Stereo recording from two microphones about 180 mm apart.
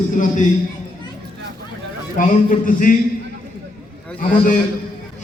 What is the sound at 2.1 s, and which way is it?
Speech, 45° left (ahead or behind).